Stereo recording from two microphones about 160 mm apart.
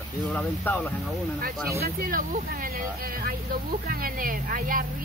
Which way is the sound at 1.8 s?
65° right (ahead or behind).